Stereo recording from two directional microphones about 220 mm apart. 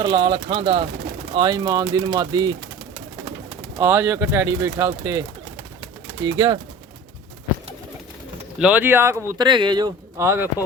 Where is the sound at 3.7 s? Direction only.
10° right (ahead or behind).